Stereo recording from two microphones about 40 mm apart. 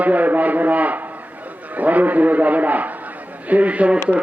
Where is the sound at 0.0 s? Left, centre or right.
Right.